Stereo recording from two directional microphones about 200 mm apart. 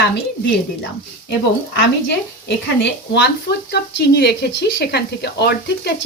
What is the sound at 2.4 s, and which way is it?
Speech, 60° left (ahead or behind).